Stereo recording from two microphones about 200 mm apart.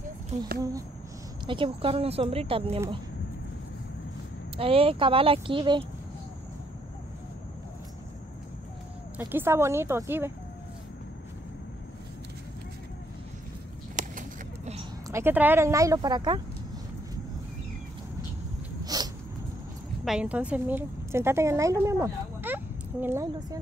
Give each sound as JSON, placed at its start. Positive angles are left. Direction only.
{"t": 0.6, "sound": "speech", "side_deg": -15}
{"t": 4.6, "sound": "speech", "side_deg": -30}
{"t": 9.3, "sound": "speech", "side_deg": -10}
{"t": 15.0, "sound": "speech", "side_deg": -10}
{"t": 18.9, "sound": "dog", "side_deg": -20}
{"t": 20.1, "sound": "a woman's voice", "side_deg": -5}